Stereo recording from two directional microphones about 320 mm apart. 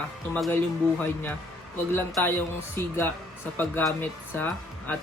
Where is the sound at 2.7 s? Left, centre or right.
Centre.